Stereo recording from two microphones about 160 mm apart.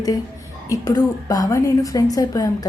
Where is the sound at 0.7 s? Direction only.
20° left (ahead or behind).